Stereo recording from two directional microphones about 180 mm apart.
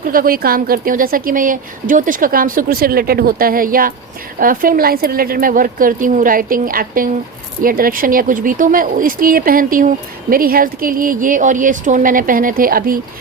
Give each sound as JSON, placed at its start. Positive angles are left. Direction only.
{"t": 0.0, "sound": "speech", "side_deg": -50}